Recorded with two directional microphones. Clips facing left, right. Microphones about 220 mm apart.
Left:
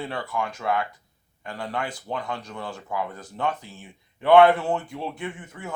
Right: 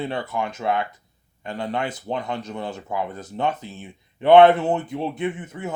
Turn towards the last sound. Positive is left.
turn(degrees=-20)  # may be behind; listen again after turning